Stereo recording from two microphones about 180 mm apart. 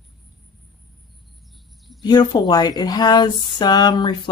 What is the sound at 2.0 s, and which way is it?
Speech, 25° left (ahead or behind).